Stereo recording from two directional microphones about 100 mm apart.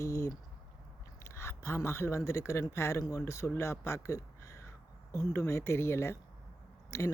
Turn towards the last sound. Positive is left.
turn(degrees=30)  # may be behind; listen again after turning